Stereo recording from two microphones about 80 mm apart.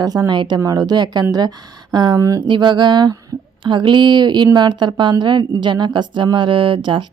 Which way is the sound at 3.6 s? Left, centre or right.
Right.